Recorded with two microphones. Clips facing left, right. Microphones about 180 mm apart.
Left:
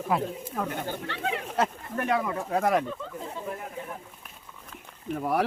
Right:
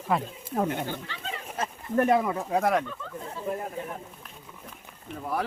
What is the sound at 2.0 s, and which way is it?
Speech, 25° right (ahead or behind).